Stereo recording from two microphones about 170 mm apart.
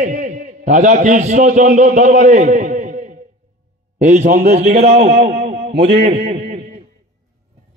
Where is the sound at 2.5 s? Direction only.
50° right (ahead or behind).